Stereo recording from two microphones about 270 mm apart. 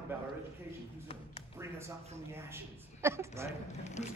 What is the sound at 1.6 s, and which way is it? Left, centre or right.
Speech, centre.